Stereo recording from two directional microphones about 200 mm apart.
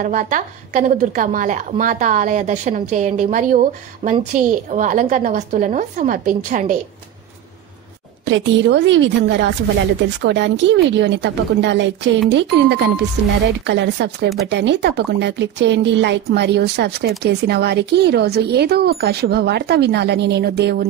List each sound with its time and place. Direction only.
0.0 s a woman's voice: 40° right (ahead or behind)
8.3 s a woman's voice: 60° right (ahead or behind)